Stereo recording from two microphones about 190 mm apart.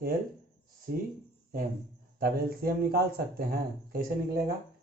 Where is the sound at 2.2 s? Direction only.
50° right (ahead or behind).